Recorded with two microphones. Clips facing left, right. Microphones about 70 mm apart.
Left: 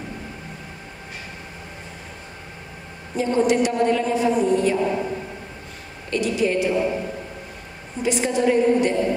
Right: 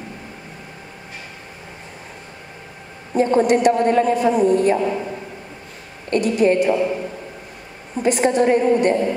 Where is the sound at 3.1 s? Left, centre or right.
Right.